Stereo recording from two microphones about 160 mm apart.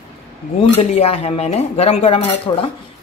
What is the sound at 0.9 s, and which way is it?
Speech, 40° left (ahead or behind).